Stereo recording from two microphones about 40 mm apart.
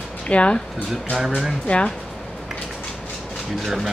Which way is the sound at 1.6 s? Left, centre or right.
Left.